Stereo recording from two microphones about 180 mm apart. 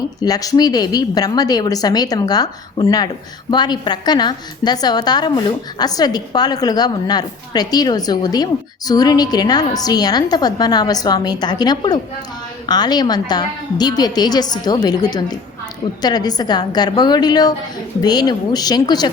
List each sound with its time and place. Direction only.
0.2 s a woman's voice: 20° left (ahead or behind)